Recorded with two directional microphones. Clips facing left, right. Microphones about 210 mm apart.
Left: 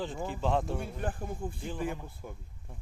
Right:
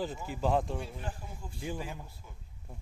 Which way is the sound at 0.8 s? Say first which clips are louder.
Left 5 dB; 55° left (ahead or behind).